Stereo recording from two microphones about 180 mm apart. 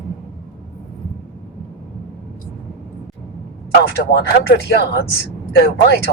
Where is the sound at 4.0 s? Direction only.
70° left (ahead or behind).